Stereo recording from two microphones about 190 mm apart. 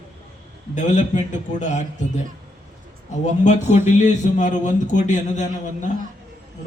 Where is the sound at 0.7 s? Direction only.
40° left (ahead or behind).